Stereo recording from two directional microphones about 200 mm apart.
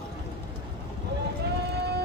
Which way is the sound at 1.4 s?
55° right (ahead or behind).